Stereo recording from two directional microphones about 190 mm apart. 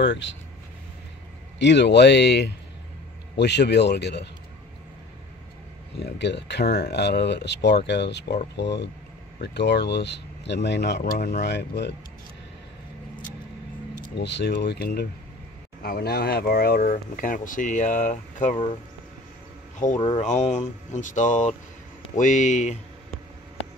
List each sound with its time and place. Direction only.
0.0 s speech: 65° left (ahead or behind)
1.6 s speech: 65° left (ahead or behind)
5.9 s speech: 60° left (ahead or behind)
13.9 s speech: 65° left (ahead or behind); by 18.6 s 40° left (ahead or behind)
20.0 s speech: 25° left (ahead or behind)
20.2 s speech: 35° left (ahead or behind)